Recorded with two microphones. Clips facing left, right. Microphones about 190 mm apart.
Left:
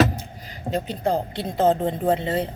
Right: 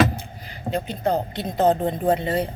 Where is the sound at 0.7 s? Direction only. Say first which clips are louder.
Even; 35° left (ahead or behind).